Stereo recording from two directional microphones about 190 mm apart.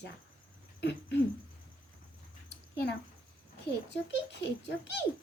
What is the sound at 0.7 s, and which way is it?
Owl, 65° left (ahead or behind).